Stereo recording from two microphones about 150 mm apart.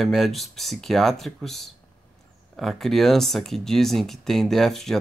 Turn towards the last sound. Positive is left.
turn(degrees=0)  # may be behind; listen again after turning